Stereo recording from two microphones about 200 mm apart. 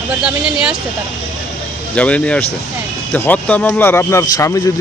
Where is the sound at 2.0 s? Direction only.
5° left (ahead or behind).